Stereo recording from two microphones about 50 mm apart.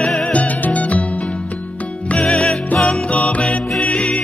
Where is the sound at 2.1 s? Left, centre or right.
Centre.